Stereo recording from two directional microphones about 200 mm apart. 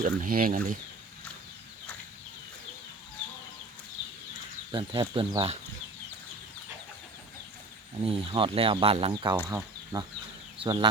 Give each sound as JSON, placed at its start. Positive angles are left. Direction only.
{"t": 0.0, "sound": "speech", "side_deg": -40}
{"t": 4.7, "sound": "speech", "side_deg": -25}
{"t": 8.0, "sound": "speech", "side_deg": -25}
{"t": 9.5, "sound": "speech", "side_deg": -15}